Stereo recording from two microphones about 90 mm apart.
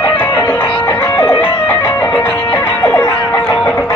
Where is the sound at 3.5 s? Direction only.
10° left (ahead or behind).